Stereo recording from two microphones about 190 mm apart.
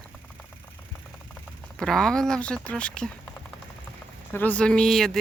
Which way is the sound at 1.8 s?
5° left (ahead or behind).